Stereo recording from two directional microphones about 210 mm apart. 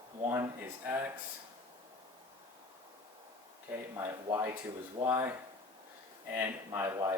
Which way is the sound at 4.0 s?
15° right (ahead or behind).